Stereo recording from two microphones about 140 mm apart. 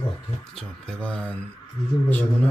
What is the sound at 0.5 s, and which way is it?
Speech, 5° left (ahead or behind).